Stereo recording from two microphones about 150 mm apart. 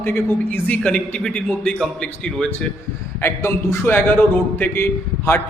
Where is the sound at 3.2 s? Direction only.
15° left (ahead or behind).